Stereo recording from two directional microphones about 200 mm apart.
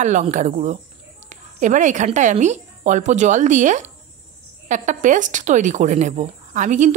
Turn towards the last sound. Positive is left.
turn(degrees=-40)  # may be behind; listen again after turning